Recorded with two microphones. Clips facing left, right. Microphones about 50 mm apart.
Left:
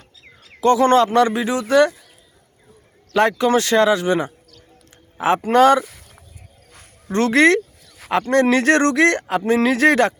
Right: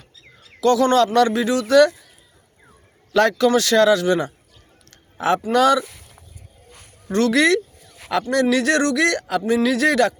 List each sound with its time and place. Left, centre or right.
0.6 s speech: left
3.2 s speech: left
5.4 s speech: left
7.1 s speech: left